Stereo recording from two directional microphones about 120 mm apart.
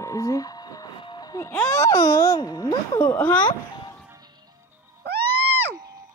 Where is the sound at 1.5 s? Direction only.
25° left (ahead or behind).